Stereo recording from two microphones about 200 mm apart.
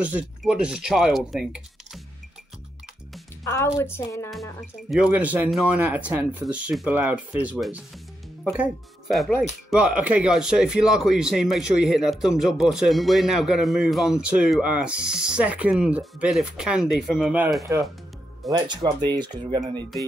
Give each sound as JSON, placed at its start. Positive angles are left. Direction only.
{"t": 0.0, "sound": "speech", "side_deg": -5}
{"t": 3.4, "sound": "a woman's voice", "side_deg": 15}
{"t": 4.3, "sound": "speech", "side_deg": 0}
{"t": 19.0, "sound": "speech", "side_deg": -20}